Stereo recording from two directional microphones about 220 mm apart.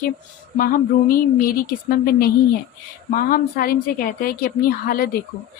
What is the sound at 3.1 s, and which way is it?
A woman's voice, 40° left (ahead or behind).